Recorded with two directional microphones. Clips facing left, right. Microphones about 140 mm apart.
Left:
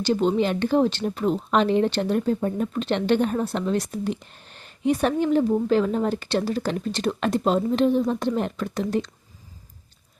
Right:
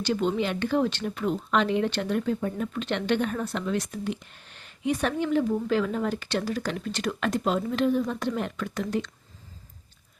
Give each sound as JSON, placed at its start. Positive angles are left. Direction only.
{"t": 0.0, "sound": "speech", "side_deg": 35}